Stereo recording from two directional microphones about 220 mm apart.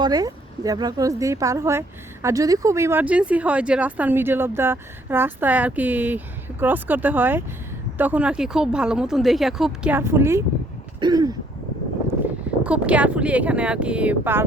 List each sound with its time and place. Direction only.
0.0 s speech: 15° right (ahead or behind)
12.6 s speech: 5° right (ahead or behind)